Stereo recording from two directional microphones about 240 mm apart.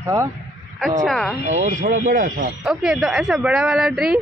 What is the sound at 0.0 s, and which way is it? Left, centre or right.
Speech, centre.